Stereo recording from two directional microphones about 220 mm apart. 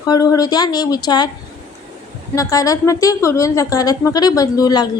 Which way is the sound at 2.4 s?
15° left (ahead or behind).